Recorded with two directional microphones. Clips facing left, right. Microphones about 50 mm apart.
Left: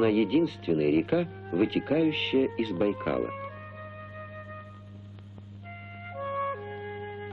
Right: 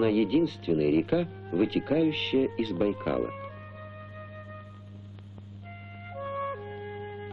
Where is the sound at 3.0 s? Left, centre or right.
Centre.